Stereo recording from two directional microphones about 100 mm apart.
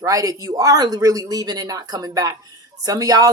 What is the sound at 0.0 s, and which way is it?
Speech, 35° right (ahead or behind).